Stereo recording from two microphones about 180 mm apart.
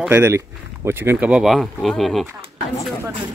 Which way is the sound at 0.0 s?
15° right (ahead or behind).